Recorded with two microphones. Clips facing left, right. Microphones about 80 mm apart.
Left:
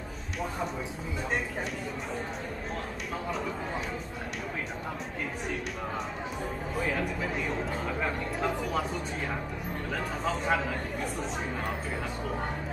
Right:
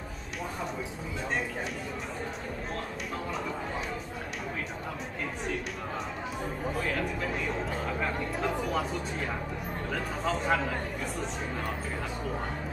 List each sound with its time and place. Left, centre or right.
8.0 s speech: centre
9.9 s speech: centre